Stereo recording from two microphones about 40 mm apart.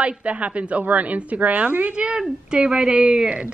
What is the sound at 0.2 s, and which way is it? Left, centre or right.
Speech, right.